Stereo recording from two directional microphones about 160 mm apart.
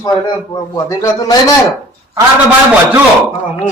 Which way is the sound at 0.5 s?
25° left (ahead or behind).